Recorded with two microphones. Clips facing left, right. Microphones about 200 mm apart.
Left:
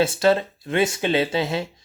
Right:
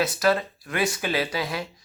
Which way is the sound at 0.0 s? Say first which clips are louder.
Left 4 dB; 25° left (ahead or behind).